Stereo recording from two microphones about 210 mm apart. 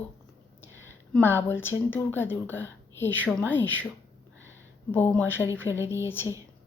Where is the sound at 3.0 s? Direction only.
10° left (ahead or behind).